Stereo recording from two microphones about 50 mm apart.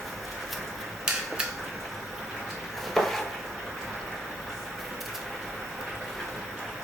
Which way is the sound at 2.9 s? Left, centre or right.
Centre.